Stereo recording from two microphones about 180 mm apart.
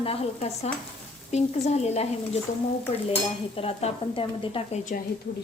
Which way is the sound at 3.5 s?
30° left (ahead or behind).